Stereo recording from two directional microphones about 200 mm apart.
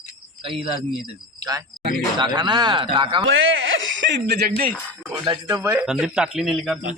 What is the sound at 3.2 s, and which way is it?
Speech, 80° right.